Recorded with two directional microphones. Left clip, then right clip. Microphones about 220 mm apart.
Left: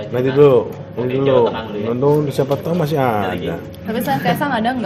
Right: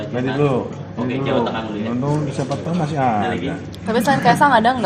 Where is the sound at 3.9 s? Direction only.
25° right (ahead or behind).